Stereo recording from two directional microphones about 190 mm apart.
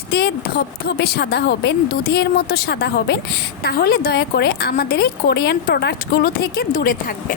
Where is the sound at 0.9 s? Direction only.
60° left (ahead or behind).